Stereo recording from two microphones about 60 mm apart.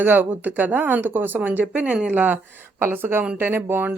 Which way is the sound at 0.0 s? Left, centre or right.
Right.